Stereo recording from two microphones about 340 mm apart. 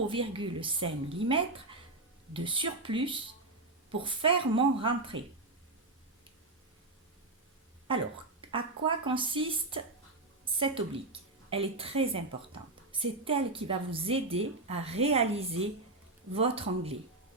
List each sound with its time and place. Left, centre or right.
0.1 s a woman's voice: centre
7.9 s a woman's voice: centre